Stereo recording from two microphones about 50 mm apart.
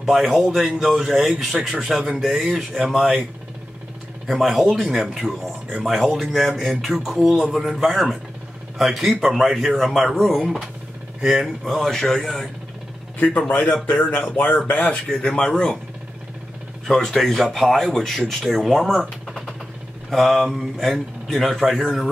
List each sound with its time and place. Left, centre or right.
0.0 s a man's voice: centre
4.3 s a man's voice: centre
11.1 s speech: centre
11.6 s speech: centre
13.5 s speech: left
14.9 s speech: centre
16.8 s a man's voice: centre
18.7 s a man's voice: centre